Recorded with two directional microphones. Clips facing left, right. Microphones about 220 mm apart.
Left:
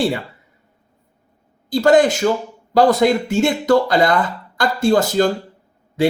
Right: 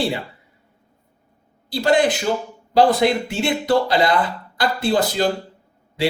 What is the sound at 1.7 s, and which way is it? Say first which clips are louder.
A man's voice: left 4 dB; 45° left (ahead or behind).